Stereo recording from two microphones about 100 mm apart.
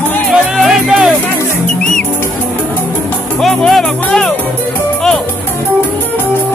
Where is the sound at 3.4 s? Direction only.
Centre (ahead or behind).